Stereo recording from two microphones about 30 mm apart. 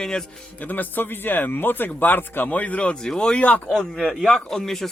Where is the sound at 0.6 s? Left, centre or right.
Left.